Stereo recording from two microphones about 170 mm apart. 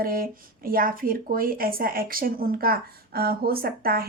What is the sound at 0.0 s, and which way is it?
A woman's voice, 60° right (ahead or behind).